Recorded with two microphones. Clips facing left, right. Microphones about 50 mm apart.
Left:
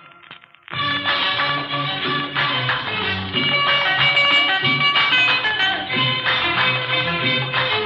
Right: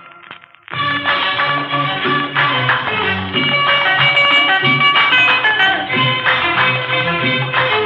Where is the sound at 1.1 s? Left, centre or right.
Right.